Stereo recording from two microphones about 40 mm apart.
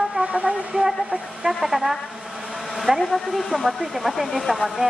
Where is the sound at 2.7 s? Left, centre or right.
Centre.